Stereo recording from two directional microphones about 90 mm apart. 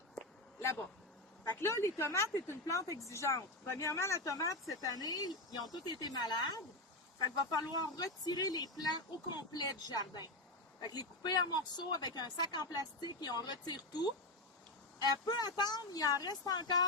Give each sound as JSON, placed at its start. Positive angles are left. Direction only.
{"t": 1.5, "sound": "speech", "side_deg": 30}